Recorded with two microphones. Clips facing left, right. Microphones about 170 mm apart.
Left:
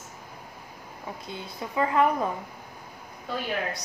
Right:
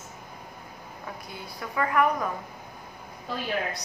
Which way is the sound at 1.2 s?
25° left (ahead or behind).